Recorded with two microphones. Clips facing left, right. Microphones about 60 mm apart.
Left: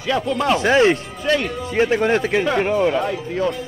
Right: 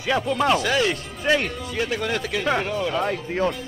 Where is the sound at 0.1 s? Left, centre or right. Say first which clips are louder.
Left 1 dB; right.